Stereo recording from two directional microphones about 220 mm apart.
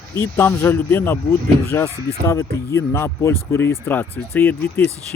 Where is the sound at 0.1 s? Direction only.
10° left (ahead or behind).